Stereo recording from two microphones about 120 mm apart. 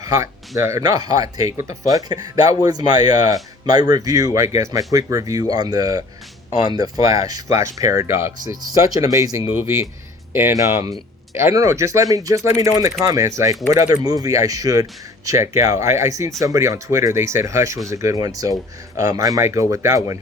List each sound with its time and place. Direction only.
0.0 s speech: 25° right (ahead or behind)